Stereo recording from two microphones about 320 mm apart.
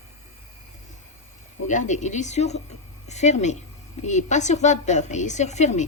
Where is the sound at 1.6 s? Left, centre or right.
Left.